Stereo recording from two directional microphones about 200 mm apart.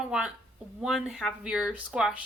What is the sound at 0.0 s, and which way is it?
Speech, 5° right (ahead or behind).